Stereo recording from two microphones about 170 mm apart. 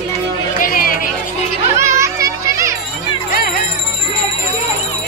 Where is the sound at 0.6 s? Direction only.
55° left (ahead or behind).